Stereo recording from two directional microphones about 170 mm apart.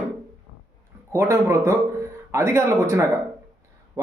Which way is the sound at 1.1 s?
20° right (ahead or behind).